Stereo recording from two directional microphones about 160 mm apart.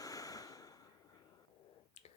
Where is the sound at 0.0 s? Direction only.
20° left (ahead or behind).